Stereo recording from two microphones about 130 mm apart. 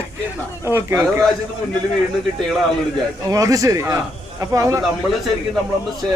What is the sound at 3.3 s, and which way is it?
Speech, 25° right (ahead or behind).